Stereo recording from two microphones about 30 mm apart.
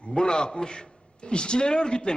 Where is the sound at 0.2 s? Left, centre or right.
Left.